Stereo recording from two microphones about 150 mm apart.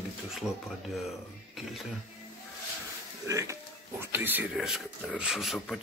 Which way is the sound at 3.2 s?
20° right (ahead or behind).